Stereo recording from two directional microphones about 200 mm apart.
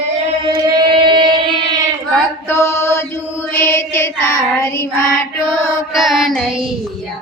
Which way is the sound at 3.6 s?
10° left (ahead or behind).